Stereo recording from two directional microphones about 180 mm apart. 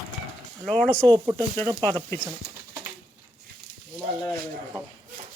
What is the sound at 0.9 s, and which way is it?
Speech, 20° right (ahead or behind).